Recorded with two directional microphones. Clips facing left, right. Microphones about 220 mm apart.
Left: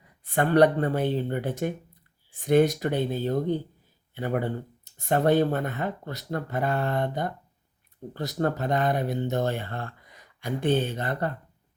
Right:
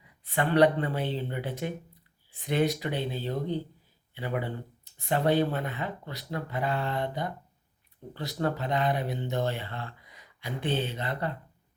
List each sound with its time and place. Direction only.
0.3 s speech: 45° left (ahead or behind)